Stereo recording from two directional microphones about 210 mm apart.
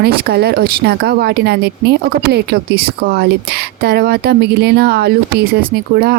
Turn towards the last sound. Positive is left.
turn(degrees=-50)  # may be behind; listen again after turning